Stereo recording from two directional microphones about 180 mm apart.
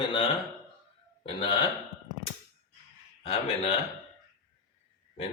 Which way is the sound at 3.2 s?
35° left (ahead or behind).